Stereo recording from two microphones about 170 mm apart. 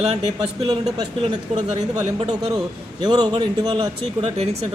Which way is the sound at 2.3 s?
25° right (ahead or behind).